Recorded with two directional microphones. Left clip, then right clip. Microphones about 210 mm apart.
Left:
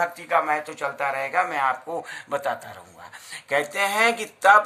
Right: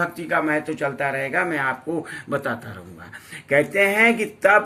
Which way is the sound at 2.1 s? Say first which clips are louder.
Right 1 dB; 50° left (ahead or behind).